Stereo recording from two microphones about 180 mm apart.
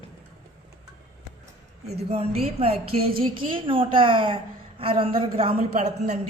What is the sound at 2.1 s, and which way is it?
A woman's voice, 35° right (ahead or behind).